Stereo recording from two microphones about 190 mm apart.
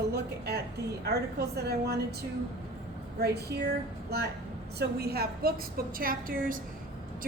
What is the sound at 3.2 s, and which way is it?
A woman's voice, 60° right (ahead or behind).